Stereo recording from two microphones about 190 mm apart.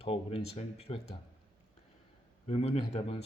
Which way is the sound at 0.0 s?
30° left (ahead or behind).